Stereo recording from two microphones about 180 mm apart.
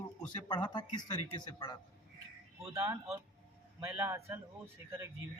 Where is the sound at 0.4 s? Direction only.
25° left (ahead or behind).